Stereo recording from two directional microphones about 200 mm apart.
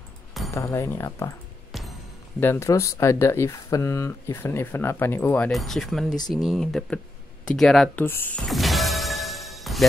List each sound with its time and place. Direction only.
0.6 s speech: 15° left (ahead or behind)
2.4 s speech: 10° left (ahead or behind)
6.0 s speech: 20° left (ahead or behind)
6.3 s speech: centre (ahead or behind)
8.5 s music: centre (ahead or behind)